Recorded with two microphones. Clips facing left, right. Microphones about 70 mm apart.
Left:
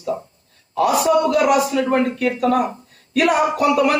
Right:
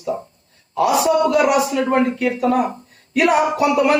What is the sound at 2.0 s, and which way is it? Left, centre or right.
Speech, centre.